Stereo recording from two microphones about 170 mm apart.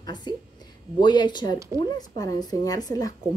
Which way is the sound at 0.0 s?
25° left (ahead or behind).